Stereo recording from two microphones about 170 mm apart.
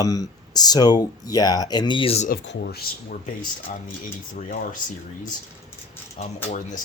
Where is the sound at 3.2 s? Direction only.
45° left (ahead or behind).